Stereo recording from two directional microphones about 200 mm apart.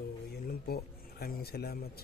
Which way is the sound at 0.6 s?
50° left (ahead or behind).